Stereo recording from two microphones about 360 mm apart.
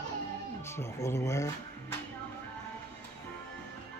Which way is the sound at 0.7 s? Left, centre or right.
Centre.